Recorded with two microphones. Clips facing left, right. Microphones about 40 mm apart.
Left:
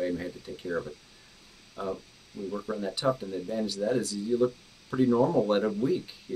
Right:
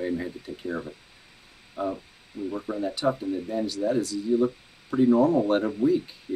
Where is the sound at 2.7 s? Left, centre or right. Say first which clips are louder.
Right 2 dB; centre.